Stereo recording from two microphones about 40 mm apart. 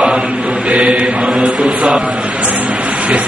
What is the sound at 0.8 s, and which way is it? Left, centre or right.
Mantra, right.